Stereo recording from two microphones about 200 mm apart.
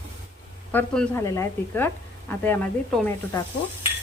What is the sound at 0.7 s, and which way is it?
Speech, 5° left (ahead or behind).